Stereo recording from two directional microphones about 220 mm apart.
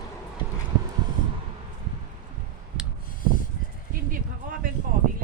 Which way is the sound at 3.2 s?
40° left (ahead or behind).